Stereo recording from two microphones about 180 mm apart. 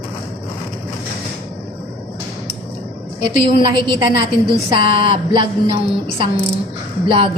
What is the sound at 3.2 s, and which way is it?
A woman's voice, 25° right (ahead or behind).